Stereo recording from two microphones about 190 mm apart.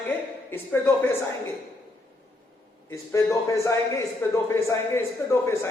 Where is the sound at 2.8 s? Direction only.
15° left (ahead or behind).